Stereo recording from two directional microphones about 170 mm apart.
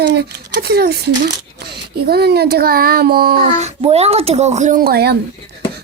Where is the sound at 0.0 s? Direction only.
80° right; by 3.3 s 65° right (ahead or behind).